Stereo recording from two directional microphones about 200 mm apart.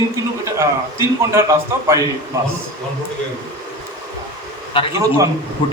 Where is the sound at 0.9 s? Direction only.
15° right (ahead or behind).